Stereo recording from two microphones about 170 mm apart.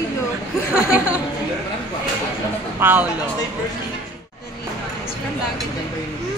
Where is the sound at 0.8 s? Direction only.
10° right (ahead or behind).